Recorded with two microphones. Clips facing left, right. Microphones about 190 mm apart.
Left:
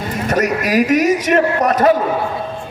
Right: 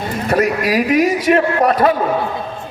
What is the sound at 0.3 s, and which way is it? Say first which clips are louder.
A man's voice: right 1 dB; 45° left (ahead or behind).